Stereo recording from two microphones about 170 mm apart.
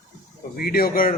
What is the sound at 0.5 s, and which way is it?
Speech, 60° left (ahead or behind).